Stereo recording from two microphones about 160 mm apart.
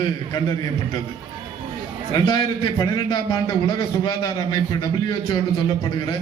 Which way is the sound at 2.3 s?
30° left (ahead or behind).